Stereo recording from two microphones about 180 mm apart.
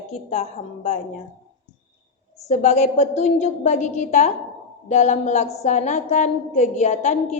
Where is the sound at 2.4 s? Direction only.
40° left (ahead or behind).